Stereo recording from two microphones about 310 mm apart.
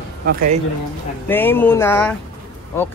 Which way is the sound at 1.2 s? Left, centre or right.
Centre.